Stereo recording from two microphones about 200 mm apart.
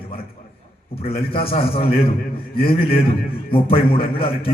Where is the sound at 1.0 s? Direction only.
30° left (ahead or behind).